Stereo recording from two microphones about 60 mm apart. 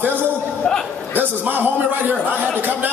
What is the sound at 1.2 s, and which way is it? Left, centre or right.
Speech, right.